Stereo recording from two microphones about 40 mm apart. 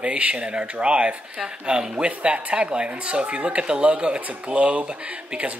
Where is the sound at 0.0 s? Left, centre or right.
Right.